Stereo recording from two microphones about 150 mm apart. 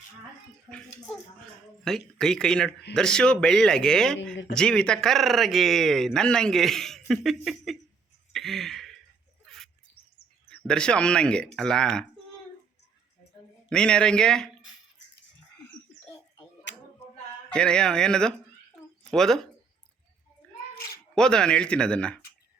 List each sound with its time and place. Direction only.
0.7 s speech: 15° right (ahead or behind)
1.8 s speech: 5° left (ahead or behind)
8.3 s a sound: centre (ahead or behind)
10.5 s speech: 5° left (ahead or behind)
13.7 s speech: 5° left (ahead or behind)
17.5 s speech: 5° left (ahead or behind)
21.2 s speech: 5° left (ahead or behind)